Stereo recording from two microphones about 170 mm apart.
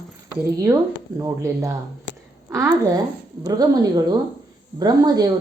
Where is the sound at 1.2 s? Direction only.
15° right (ahead or behind).